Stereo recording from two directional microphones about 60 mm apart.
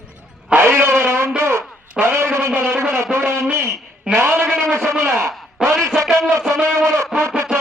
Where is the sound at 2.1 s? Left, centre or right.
Right.